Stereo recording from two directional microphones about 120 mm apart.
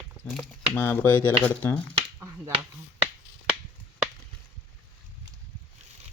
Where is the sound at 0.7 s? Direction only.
15° left (ahead or behind).